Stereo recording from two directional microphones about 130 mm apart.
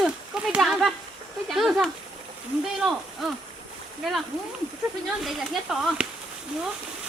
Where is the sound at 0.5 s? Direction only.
Centre (ahead or behind).